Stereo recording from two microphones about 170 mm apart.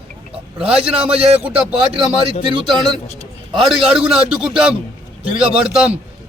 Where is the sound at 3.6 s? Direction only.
Centre (ahead or behind).